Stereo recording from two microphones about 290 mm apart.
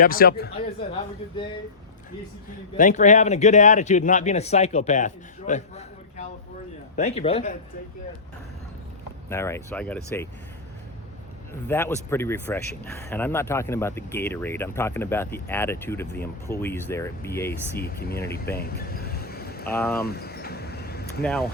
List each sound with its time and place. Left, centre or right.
0.0 s speech: left
2.7 s a man's voice: left
9.3 s speech: centre
11.7 s speech: centre
17.7 s speech: left
18.5 s a sound: left
19.6 s speech: centre
20.1 s a sound: left
21.2 s speech: centre